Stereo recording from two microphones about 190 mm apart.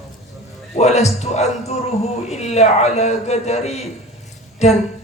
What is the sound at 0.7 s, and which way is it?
A man's voice, 35° left (ahead or behind).